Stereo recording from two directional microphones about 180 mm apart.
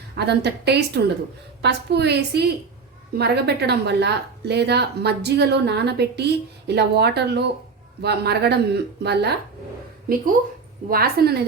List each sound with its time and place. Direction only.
0.2 s speech: 70° right (ahead or behind)
10.8 s a woman's voice: 55° right (ahead or behind)